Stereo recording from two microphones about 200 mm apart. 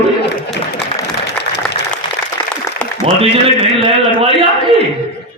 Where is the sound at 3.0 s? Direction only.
30° right (ahead or behind).